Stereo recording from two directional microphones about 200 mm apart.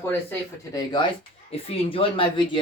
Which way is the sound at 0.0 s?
10° left (ahead or behind).